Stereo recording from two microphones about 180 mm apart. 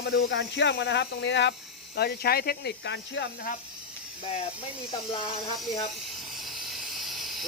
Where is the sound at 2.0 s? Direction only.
60° left (ahead or behind); by 3.2 s 75° left (ahead or behind).